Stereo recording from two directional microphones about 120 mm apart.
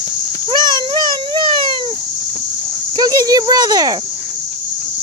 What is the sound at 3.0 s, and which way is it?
Cricket, 30° right (ahead or behind).